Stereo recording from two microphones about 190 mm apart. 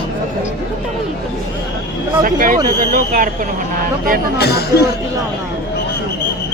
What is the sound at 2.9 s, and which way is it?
Speech, 45° right (ahead or behind).